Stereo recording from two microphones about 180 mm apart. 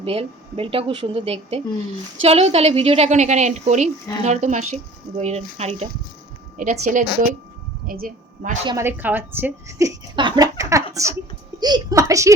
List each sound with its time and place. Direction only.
0.0 s a woman's voice: 30° right (ahead or behind); by 8.5 s 50° right (ahead or behind)
8.6 s a woman's voice: 15° right (ahead or behind)